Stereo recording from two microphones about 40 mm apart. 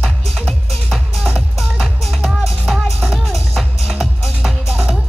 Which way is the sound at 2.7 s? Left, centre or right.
Centre.